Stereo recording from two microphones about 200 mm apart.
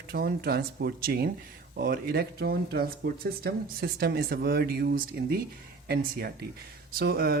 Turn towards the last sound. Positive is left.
turn(degrees=-50)  # may be behind; listen again after turning